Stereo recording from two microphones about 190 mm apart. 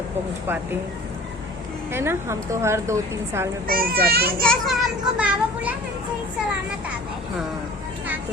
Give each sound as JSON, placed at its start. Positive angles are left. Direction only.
{"t": 1.9, "sound": "a woman's voice", "side_deg": -10}
{"t": 3.7, "sound": "a child's voice", "side_deg": -50}
{"t": 4.4, "sound": "a child's voice", "side_deg": 0}